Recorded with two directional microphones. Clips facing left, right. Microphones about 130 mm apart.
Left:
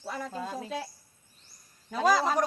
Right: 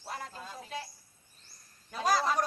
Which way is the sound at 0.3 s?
85° left.